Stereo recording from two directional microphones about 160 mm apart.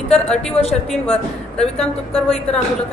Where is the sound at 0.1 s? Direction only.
5° left (ahead or behind).